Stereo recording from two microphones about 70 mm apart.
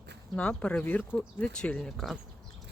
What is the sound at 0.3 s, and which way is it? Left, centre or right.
Speech, centre.